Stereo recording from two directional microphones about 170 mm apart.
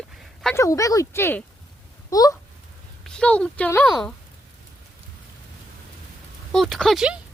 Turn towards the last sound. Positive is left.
turn(degrees=0)  # may be behind; listen again after turning